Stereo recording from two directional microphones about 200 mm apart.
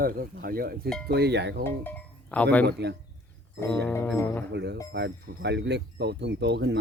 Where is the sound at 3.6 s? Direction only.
5° left (ahead or behind).